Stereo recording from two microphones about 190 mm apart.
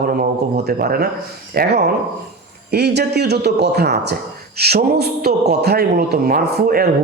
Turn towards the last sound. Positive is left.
turn(degrees=-50)  # may be behind; listen again after turning